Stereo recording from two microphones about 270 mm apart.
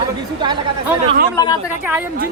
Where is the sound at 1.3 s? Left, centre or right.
Centre.